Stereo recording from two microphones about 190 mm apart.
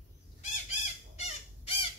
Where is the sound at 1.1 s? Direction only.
35° left (ahead or behind).